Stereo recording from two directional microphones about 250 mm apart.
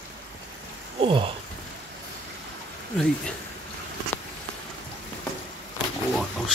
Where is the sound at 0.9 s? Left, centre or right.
Right.